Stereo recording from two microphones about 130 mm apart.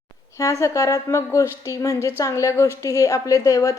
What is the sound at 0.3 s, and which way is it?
A woman's voice, 25° left (ahead or behind).